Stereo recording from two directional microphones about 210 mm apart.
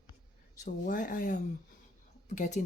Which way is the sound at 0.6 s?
40° left (ahead or behind).